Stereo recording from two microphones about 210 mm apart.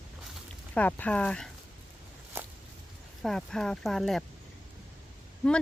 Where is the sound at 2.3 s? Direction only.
10° right (ahead or behind).